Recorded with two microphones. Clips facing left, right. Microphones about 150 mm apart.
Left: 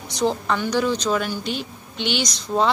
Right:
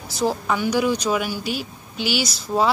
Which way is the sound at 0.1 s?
5° right (ahead or behind).